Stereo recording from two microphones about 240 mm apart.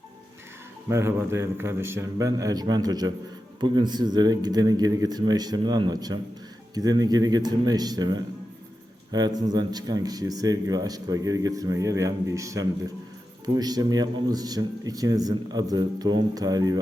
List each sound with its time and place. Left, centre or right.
0.9 s speech: centre